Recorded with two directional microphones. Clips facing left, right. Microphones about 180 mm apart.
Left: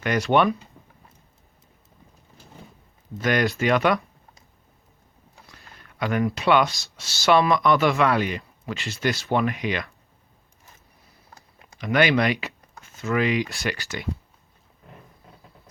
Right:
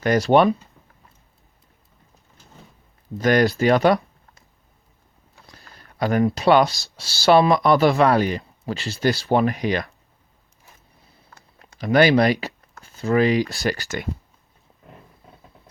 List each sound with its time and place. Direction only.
0.0 s speech: 35° right (ahead or behind)
3.2 s speech: 35° right (ahead or behind)
5.5 s speech: 35° right (ahead or behind)
11.8 s speech: 35° right (ahead or behind)